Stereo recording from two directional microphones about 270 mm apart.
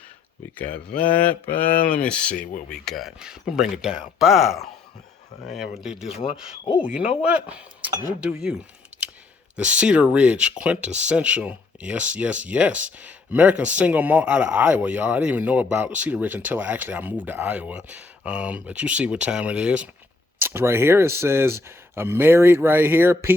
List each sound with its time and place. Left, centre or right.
1.0 s speech: centre
6.1 s speech: centre
6.7 s speech: centre
8.9 s clicking: right
9.6 s speech: centre